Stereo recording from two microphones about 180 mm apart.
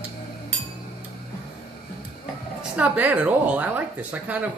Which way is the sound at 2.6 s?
10° right (ahead or behind).